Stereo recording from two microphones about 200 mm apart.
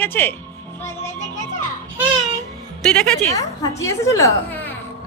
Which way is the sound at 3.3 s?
15° left (ahead or behind).